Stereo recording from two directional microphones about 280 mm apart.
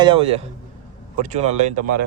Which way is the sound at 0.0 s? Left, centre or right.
Centre.